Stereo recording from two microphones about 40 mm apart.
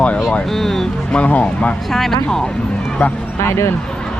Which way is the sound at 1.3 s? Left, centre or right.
Left.